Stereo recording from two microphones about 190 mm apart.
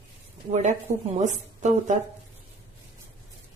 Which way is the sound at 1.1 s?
40° right (ahead or behind).